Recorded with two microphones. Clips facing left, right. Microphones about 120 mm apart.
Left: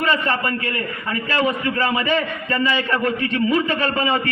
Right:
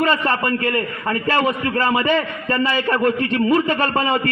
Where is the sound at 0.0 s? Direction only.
45° right (ahead or behind).